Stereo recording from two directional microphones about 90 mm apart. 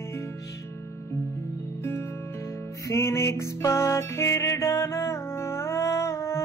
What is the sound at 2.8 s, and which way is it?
Music, 30° left (ahead or behind).